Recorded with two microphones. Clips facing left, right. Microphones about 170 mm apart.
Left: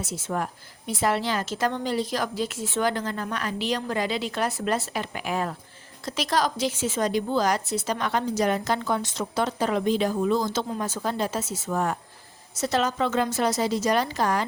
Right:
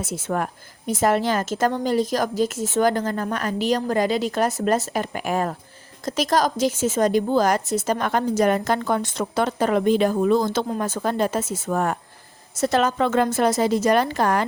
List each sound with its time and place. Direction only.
0.0 s a woman's voice: 60° right (ahead or behind)